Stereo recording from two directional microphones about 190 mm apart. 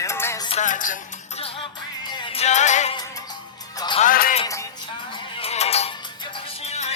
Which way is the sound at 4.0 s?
45° left (ahead or behind).